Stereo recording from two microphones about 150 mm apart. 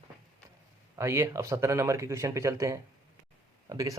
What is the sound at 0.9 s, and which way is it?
Speech, 20° right (ahead or behind).